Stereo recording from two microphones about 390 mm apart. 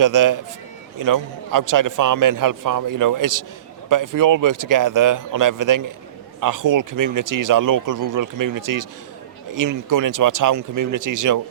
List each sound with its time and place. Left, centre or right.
0.0 s speech: right